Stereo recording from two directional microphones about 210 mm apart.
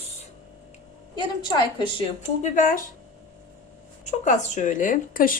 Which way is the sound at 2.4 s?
40° left (ahead or behind).